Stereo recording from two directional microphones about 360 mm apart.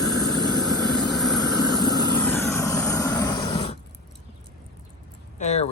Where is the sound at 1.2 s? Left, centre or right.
Centre.